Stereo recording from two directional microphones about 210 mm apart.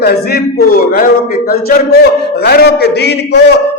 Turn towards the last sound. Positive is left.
turn(degrees=55)  # may be behind; listen again after turning